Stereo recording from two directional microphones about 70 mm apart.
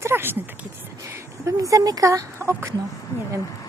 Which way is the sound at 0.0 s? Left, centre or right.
Right.